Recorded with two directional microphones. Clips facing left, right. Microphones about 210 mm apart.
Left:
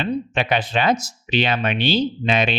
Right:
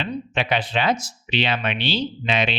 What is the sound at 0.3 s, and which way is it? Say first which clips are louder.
Speech: even; 50° left (ahead or behind).